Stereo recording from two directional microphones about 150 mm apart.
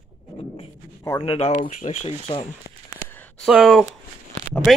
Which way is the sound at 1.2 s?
40° left (ahead or behind).